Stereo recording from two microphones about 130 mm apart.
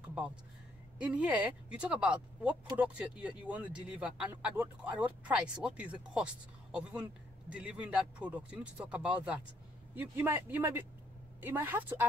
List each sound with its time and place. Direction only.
0.9 s speech: 10° right (ahead or behind)